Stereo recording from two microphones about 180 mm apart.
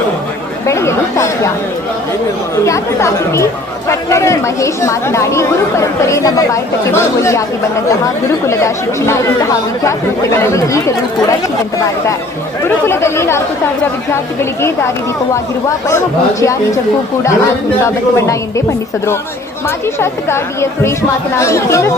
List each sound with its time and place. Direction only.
0.7 s speech: 15° left (ahead or behind)
2.6 s speech: 15° left (ahead or behind)
10.5 s speech: 15° left (ahead or behind)
12.6 s speech: 15° left (ahead or behind)
16.4 s speech: 15° left (ahead or behind)
17.8 s speech: 15° left (ahead or behind)
20.0 s speech: 15° left (ahead or behind)